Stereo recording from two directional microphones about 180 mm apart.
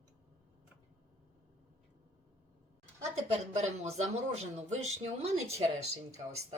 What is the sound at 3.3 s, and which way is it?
Speech, 35° right (ahead or behind).